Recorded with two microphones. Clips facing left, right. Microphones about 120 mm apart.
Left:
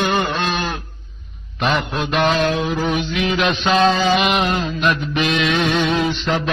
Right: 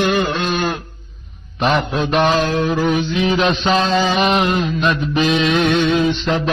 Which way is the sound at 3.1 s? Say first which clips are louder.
Right 3 dB; 30° right (ahead or behind).